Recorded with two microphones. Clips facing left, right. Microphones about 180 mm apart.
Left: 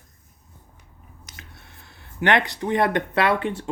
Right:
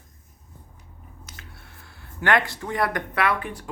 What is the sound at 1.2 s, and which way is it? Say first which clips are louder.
Speech: left 1 dB; 20° left (ahead or behind).